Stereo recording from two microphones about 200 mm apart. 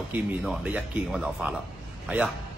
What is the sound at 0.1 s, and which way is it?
A man's voice, 5° right (ahead or behind).